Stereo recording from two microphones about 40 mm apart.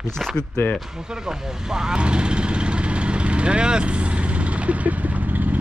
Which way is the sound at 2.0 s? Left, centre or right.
Right.